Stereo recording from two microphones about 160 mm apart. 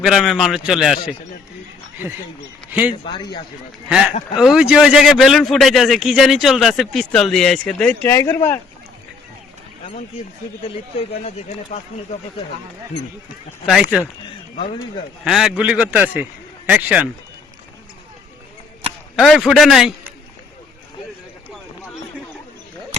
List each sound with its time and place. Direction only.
0.0 s a man's voice: centre (ahead or behind)
2.6 s speech: 10° right (ahead or behind)
2.9 s speech: 30° left (ahead or behind)
3.8 s a man's voice: 5° right (ahead or behind)
8.0 s speech: 15° left (ahead or behind)
11.2 s speech: 45° left (ahead or behind)
13.7 s a man's voice: centre (ahead or behind)
15.2 s a man's voice: centre (ahead or behind)
19.1 s a man's voice: centre (ahead or behind)